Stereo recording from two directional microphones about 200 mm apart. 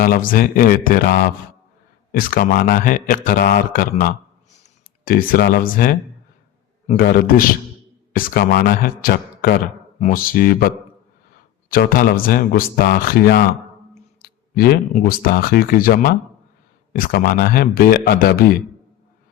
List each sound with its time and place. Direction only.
0.0 s speech: 45° left (ahead or behind)
11.7 s speech: 45° left (ahead or behind)
14.2 s a sound: 45° left (ahead or behind)
15.0 s speech: 50° left (ahead or behind)